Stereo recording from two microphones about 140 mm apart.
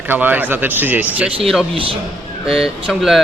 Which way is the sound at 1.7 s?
40° right (ahead or behind).